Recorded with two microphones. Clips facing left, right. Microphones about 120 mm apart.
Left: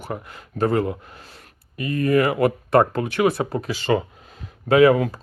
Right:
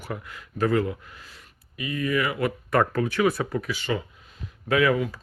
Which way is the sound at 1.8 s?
45° left (ahead or behind).